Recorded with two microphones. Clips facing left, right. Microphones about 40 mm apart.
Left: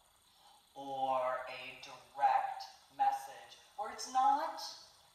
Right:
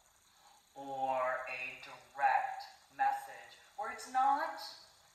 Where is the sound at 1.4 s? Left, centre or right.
Right.